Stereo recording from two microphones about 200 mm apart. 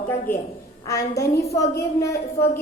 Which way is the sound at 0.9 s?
15° left (ahead or behind).